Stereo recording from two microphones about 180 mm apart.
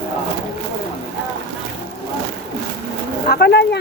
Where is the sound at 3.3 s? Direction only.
65° left (ahead or behind).